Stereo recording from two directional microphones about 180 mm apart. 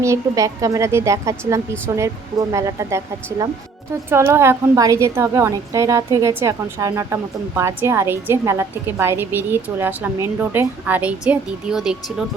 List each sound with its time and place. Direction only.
0.0 s a woman's voice: 15° right (ahead or behind)